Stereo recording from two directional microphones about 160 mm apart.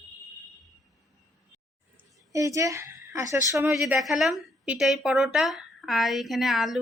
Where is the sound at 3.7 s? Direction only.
Centre (ahead or behind).